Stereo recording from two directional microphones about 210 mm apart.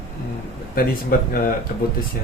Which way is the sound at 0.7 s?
45° left (ahead or behind).